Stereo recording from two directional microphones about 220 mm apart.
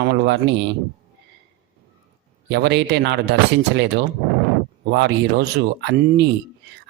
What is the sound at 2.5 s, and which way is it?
Speech, 50° right (ahead or behind).